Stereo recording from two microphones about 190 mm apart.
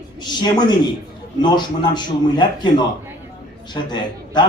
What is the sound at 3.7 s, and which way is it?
Speech, 25° left (ahead or behind).